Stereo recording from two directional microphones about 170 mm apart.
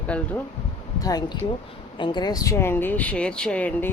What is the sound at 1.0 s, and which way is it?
Speech, 20° left (ahead or behind).